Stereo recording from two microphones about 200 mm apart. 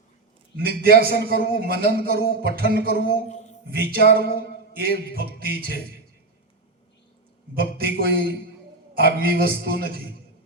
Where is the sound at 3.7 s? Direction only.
50° right (ahead or behind).